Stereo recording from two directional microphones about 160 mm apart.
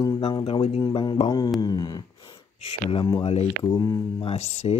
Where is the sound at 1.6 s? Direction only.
25° left (ahead or behind).